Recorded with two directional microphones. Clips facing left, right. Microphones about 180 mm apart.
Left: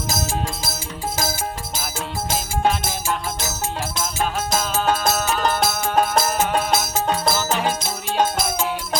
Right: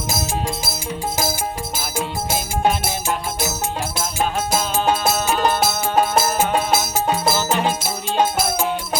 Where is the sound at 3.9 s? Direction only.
10° right (ahead or behind).